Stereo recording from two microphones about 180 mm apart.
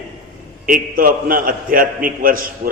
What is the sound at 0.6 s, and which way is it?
A man's voice, 50° right (ahead or behind).